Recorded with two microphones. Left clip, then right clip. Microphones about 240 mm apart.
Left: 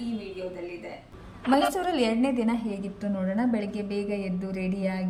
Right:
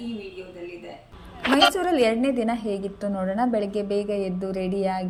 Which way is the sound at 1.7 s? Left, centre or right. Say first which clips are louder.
Right 5 dB; centre.